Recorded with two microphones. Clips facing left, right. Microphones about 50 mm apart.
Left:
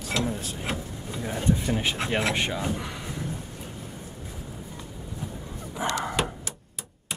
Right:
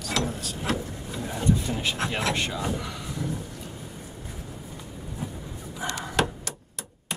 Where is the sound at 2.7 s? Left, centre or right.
Left.